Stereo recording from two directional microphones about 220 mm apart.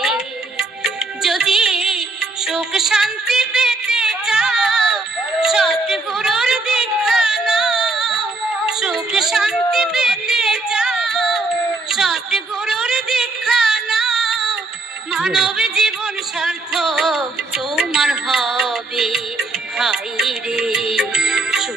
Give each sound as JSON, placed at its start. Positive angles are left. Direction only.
{"t": 0.9, "sound": "music", "side_deg": 0}
{"t": 2.4, "sound": "a sound", "side_deg": 0}
{"t": 8.6, "sound": "music", "side_deg": 0}
{"t": 11.9, "sound": "a sound", "side_deg": 0}
{"t": 15.1, "sound": "yodeling", "side_deg": -5}
{"t": 16.4, "sound": "music", "side_deg": 0}